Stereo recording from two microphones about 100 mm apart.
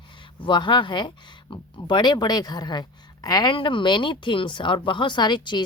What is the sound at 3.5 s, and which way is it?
Speech, 55° left (ahead or behind).